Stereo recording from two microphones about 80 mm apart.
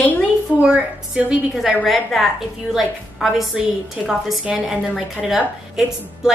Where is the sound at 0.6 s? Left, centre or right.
Centre.